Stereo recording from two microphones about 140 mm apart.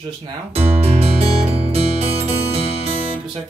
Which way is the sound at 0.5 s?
45° right (ahead or behind).